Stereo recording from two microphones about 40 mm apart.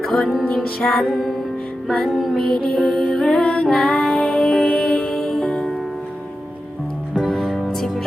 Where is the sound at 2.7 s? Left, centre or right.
Left.